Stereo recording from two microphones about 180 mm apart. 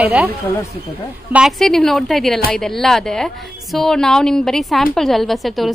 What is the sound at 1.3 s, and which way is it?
A woman's voice, centre (ahead or behind).